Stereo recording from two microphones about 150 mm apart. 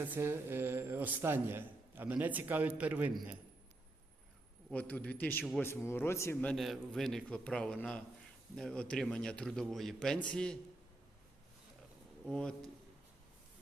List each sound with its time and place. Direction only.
0.0 s a man's voice: 15° right (ahead or behind)
4.7 s a man's voice: 10° left (ahead or behind)
6.5 s a man's voice: centre (ahead or behind)
12.2 s a man's voice: 5° left (ahead or behind)